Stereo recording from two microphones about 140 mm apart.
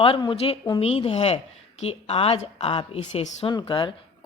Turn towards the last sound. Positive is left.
turn(degrees=35)  # may be behind; listen again after turning